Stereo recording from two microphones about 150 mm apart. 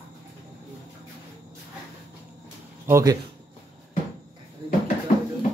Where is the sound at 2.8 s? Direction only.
20° right (ahead or behind).